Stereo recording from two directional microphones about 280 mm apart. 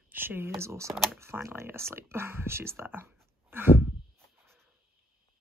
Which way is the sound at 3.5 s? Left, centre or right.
Centre.